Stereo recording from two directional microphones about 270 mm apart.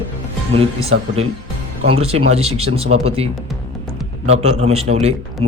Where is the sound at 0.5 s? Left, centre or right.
Right.